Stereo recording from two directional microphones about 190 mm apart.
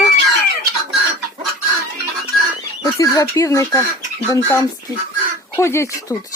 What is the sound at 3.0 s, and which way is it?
Speech, 15° left (ahead or behind).